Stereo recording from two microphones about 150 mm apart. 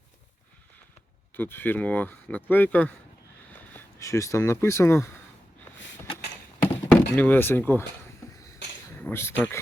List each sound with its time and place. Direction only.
1.4 s speech: 15° left (ahead or behind)
6.6 s thunk: 15° left (ahead or behind)
7.2 s speech: 10° left (ahead or behind)
9.0 s speech: 15° left (ahead or behind)